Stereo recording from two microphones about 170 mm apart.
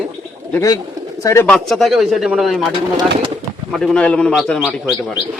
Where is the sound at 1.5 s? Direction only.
Centre (ahead or behind).